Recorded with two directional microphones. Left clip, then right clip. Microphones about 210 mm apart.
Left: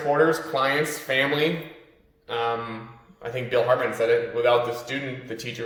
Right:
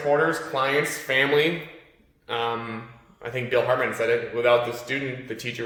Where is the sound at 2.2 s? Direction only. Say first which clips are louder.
Left 1 dB; 15° right (ahead or behind).